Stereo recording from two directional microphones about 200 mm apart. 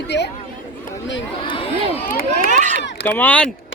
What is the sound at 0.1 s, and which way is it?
Speech, 60° left (ahead or behind).